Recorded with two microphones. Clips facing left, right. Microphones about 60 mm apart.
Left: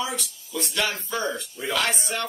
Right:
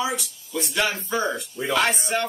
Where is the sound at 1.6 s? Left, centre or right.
Centre.